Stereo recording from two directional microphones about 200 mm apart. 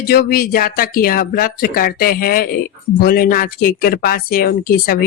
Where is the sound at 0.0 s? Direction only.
50° left (ahead or behind).